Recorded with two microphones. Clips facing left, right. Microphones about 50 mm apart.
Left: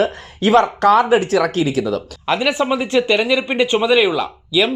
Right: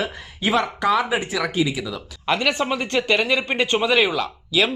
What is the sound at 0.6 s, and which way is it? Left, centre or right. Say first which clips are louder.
Speech: left 7 dB; left.